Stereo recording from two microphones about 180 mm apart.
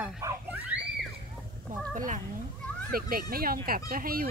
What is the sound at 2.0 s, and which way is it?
A child's voice, 45° right (ahead or behind).